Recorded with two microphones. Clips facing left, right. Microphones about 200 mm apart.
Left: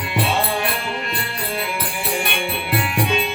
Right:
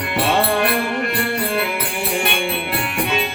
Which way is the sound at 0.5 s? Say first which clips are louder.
Right 5 dB; 60° right (ahead or behind).